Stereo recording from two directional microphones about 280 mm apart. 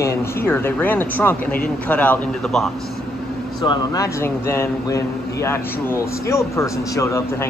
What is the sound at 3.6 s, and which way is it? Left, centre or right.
Speech, centre.